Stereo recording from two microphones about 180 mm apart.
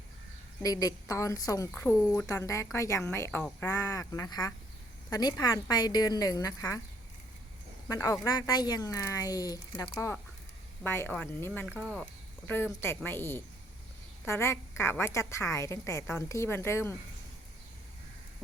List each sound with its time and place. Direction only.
0.6 s a woman's voice: 20° left (ahead or behind)
7.9 s a woman's voice: 20° left (ahead or behind)